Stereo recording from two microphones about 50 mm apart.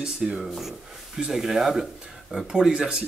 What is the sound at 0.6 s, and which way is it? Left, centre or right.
Speech, centre.